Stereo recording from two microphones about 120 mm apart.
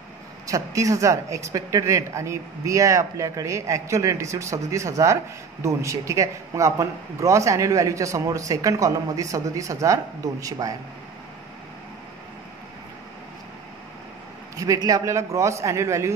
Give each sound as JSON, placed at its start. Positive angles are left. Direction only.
{"t": 0.5, "sound": "speech", "side_deg": -25}
{"t": 14.6, "sound": "speech", "side_deg": -30}